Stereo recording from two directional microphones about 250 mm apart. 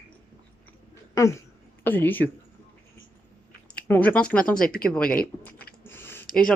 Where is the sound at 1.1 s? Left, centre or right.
Centre.